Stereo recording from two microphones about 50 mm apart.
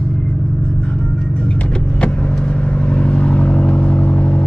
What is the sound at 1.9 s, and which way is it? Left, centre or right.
Vehicle, left.